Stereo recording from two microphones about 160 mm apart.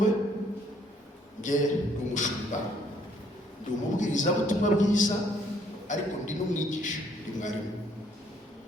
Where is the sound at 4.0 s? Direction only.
50° left (ahead or behind).